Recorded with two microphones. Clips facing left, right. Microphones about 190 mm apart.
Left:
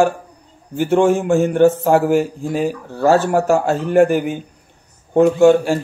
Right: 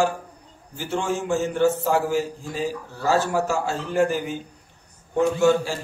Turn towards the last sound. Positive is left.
turn(degrees=60)  # may be behind; listen again after turning